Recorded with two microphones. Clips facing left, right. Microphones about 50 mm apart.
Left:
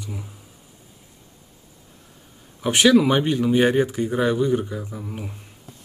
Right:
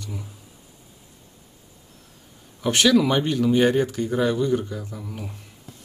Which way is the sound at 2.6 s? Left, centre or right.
Centre.